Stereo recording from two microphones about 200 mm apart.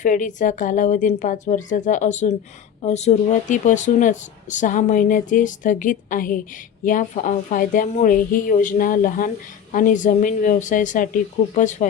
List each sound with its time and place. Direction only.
0.0 s speech: 40° left (ahead or behind)